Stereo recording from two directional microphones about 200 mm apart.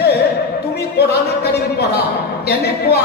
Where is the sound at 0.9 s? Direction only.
55° left (ahead or behind).